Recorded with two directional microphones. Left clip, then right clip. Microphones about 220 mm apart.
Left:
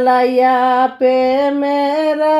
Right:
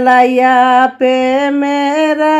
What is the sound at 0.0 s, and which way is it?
Female singing, 25° right (ahead or behind).